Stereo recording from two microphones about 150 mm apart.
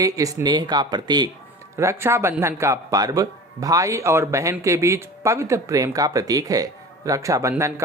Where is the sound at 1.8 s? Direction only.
15° right (ahead or behind).